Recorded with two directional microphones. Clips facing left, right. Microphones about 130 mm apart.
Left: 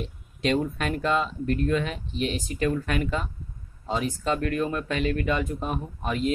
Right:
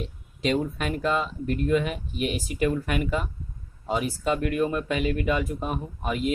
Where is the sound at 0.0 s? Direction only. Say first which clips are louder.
Even; centre (ahead or behind).